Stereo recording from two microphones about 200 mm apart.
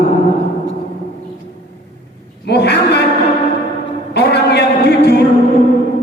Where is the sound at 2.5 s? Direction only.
55° left (ahead or behind).